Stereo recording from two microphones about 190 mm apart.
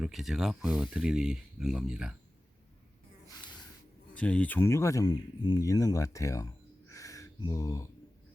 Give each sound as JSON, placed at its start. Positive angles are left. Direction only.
{"t": 0.0, "sound": "speech", "side_deg": 0}
{"t": 4.1, "sound": "speech", "side_deg": 5}
{"t": 6.9, "sound": "a sound", "side_deg": 15}